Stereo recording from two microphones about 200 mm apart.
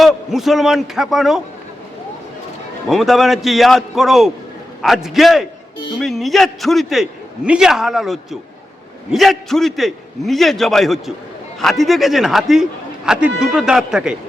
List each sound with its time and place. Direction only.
0.0 s a man's voice: centre (ahead or behind)
2.9 s a man's voice: centre (ahead or behind)